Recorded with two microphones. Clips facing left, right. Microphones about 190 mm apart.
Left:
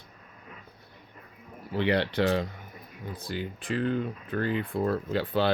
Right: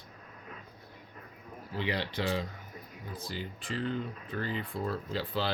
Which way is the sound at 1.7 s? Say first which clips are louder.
Left 8 dB; 65° left (ahead or behind).